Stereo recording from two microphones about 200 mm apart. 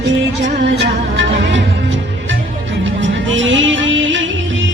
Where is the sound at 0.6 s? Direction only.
65° right (ahead or behind).